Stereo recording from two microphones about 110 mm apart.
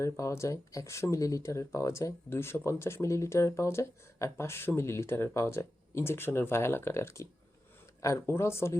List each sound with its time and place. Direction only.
0.0 s speech: 25° left (ahead or behind)